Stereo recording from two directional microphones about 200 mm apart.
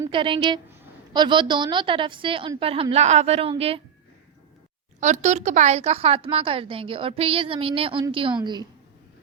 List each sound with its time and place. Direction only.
0.1 s speech: 25° right (ahead or behind)
4.9 s speech: 35° right (ahead or behind)